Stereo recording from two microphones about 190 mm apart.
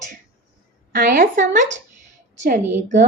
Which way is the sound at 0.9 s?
45° right (ahead or behind).